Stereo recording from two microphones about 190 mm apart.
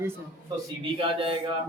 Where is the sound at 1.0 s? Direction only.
30° right (ahead or behind).